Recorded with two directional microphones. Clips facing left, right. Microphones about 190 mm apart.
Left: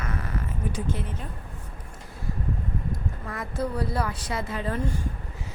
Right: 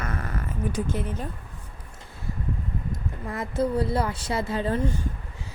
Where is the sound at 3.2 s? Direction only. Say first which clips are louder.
Right 5 dB; 25° right (ahead or behind).